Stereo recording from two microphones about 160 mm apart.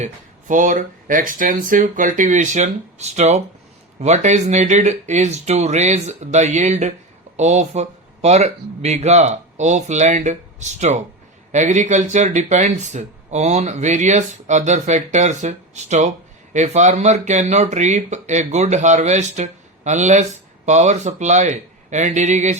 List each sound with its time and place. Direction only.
0.0 s speech: 55° right (ahead or behind)